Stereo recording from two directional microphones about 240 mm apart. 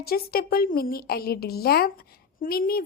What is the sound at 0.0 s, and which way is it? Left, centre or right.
A woman's voice, left.